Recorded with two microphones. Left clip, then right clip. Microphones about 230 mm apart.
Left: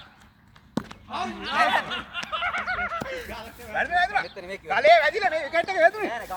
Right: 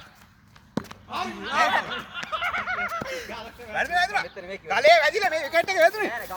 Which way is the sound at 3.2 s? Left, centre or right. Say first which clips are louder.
Right 1 dB; centre.